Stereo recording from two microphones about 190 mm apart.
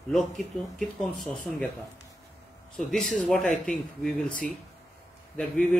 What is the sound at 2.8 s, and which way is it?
Speech, centre (ahead or behind).